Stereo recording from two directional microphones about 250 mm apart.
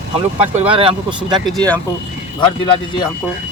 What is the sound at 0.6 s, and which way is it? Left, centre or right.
Speech, right.